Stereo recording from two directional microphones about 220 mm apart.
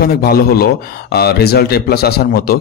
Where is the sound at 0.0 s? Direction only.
45° left (ahead or behind).